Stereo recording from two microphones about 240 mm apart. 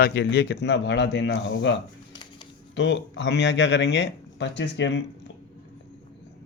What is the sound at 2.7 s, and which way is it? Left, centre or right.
Speech, left.